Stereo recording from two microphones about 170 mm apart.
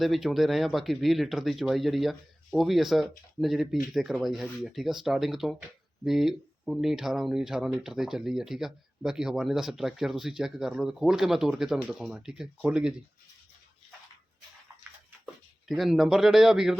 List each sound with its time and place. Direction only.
0.0 s speech: centre (ahead or behind)
15.6 s speech: centre (ahead or behind)